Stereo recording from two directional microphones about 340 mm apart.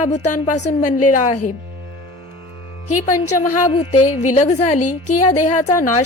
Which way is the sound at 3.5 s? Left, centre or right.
Centre.